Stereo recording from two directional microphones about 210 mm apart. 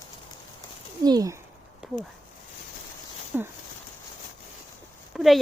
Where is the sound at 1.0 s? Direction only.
20° right (ahead or behind).